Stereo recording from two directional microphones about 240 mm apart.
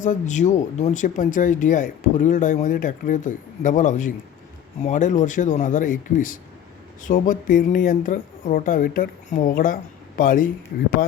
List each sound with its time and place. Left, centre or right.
0.0 s speech: left